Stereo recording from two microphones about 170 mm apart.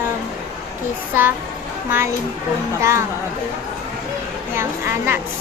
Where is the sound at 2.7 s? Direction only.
15° right (ahead or behind).